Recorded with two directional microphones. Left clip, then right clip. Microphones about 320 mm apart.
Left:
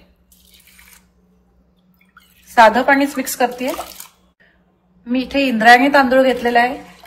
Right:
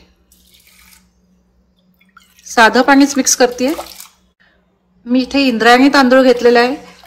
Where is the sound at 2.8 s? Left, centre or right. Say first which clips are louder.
Right 4 dB; centre.